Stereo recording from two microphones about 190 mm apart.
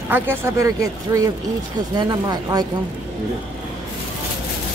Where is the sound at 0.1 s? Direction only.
15° right (ahead or behind).